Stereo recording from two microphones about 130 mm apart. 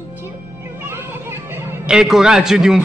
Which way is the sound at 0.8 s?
15° right (ahead or behind).